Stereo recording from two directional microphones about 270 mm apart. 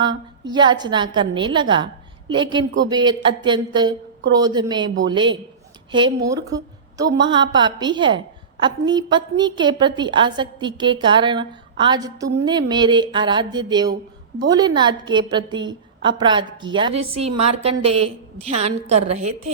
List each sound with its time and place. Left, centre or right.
0.4 s a woman's voice: centre